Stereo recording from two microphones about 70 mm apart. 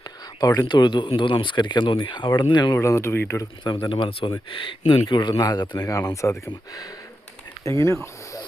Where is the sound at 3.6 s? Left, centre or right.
Left.